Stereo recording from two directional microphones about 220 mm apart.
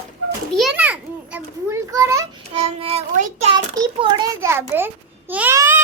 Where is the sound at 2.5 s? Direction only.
25° right (ahead or behind).